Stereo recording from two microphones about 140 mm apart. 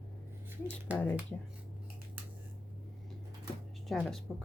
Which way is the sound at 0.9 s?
10° right (ahead or behind).